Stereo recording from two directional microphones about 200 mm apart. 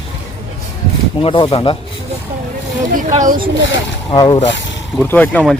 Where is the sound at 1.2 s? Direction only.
25° left (ahead or behind).